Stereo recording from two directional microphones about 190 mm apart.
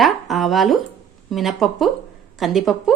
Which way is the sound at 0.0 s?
Centre (ahead or behind).